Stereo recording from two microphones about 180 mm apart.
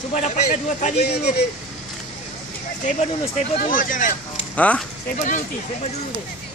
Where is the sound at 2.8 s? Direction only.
35° left (ahead or behind).